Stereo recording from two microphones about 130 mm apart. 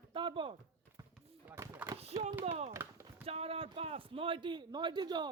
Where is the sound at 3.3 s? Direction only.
50° right (ahead or behind).